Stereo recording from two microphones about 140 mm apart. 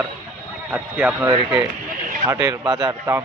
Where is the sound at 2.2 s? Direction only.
25° right (ahead or behind).